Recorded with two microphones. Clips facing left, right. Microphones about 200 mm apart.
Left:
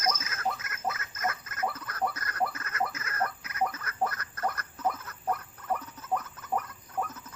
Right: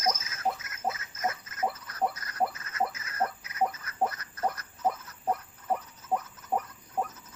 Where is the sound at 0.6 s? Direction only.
60° left (ahead or behind).